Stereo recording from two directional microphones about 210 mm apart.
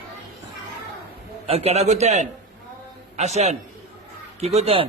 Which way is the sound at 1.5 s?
30° right (ahead or behind).